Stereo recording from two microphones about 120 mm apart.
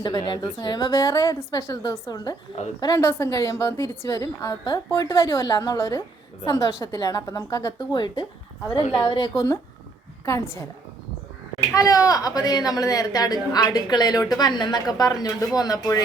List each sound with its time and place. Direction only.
0.3 s a woman's voice: 35° left (ahead or behind)
10.2 s a woman's voice: 20° left (ahead or behind)
11.7 s a woman's voice: 30° left (ahead or behind)